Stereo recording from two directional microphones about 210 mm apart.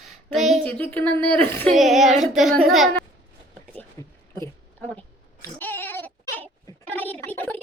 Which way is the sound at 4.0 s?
15° left (ahead or behind).